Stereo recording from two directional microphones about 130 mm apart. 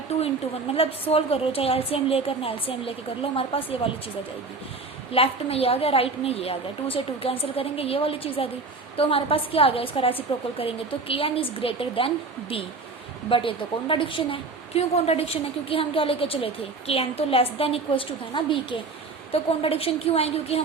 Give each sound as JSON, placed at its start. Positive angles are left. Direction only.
{"t": 0.7, "sound": "a woman's voice", "side_deg": 50}
{"t": 5.1, "sound": "a woman's voice", "side_deg": 50}